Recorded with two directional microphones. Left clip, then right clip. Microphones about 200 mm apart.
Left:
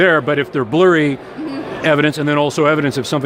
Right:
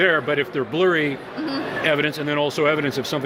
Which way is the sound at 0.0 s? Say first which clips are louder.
Left 5 dB; 50° left (ahead or behind).